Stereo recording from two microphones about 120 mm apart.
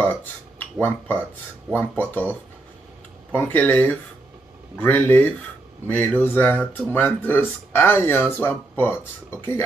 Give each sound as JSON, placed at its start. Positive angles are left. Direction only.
{"t": 0.0, "sound": "speech", "side_deg": 15}
{"t": 3.3, "sound": "speech", "side_deg": 15}